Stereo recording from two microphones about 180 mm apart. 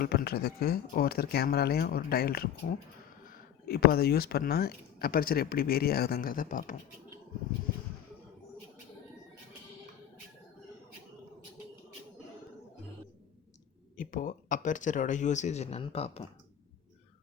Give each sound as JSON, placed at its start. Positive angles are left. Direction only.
{"t": 0.0, "sound": "speech", "side_deg": 60}
{"t": 13.9, "sound": "speech", "side_deg": 50}